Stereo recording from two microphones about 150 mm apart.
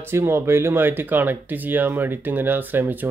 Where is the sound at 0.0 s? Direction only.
15° right (ahead or behind).